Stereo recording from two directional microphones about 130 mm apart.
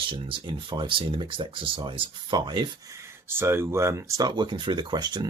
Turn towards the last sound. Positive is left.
turn(degrees=-35)  # may be behind; listen again after turning